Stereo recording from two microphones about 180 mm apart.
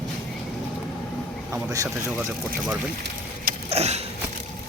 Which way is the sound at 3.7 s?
35° right (ahead or behind).